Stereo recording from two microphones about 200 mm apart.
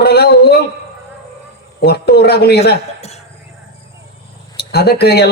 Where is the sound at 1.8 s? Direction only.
55° left (ahead or behind).